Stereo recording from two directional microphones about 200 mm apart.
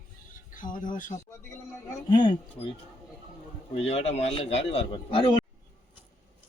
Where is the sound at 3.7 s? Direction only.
30° left (ahead or behind).